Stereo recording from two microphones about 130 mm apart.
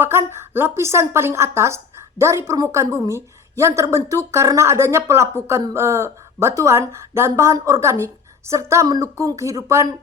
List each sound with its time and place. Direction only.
0.0 s a woman's voice: 20° right (ahead or behind)